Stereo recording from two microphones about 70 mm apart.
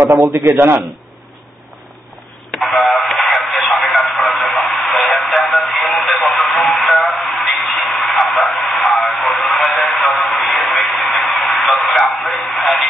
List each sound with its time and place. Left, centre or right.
0.1 s a man's voice: right
2.5 s radio: centre
11.4 s a sound: centre